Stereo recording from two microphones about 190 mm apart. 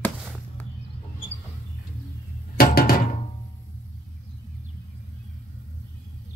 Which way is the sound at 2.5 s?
50° left (ahead or behind).